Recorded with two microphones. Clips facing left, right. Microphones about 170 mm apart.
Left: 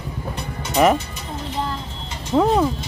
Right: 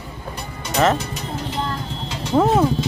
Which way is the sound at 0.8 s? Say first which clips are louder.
Left 2 dB; 15° left (ahead or behind).